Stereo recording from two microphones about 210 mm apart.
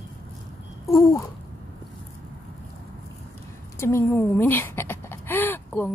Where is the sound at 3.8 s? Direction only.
10° left (ahead or behind).